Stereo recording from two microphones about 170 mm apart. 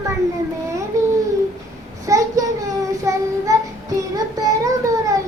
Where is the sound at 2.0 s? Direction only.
20° right (ahead or behind).